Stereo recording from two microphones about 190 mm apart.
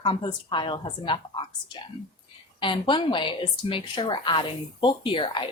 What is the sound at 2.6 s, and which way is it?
A woman's voice, 25° left (ahead or behind).